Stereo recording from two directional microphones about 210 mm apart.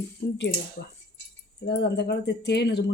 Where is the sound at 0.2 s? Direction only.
55° left (ahead or behind).